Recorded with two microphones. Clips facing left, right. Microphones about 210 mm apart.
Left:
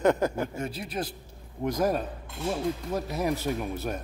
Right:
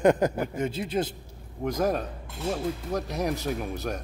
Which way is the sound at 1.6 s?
Centre (ahead or behind).